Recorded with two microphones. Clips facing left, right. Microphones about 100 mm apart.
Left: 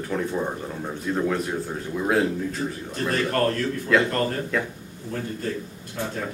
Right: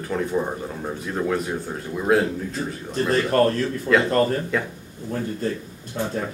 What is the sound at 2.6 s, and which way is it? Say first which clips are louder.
Speech: right 2 dB; 15° right (ahead or behind).